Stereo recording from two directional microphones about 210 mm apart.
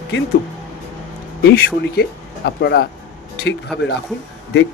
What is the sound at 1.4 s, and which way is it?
Speech, 50° left (ahead or behind).